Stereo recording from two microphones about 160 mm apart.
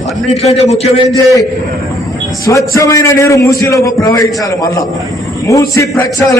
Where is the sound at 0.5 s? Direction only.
40° left (ahead or behind).